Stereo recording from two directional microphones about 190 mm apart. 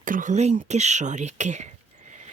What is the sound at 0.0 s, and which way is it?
Speech, 45° right (ahead or behind).